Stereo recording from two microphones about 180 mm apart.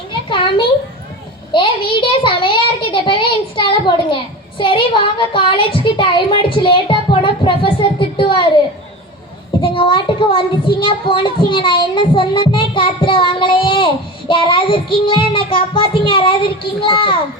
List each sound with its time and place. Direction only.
0.1 s a sound: 25° left (ahead or behind)
1.5 s speech: 30° left (ahead or behind)
9.6 s speech: 30° left (ahead or behind)